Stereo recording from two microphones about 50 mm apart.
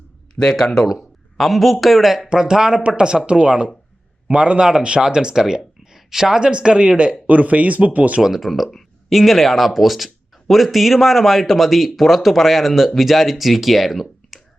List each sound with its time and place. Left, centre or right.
0.3 s speech: centre; by 8.2 s right
8.2 s speech: centre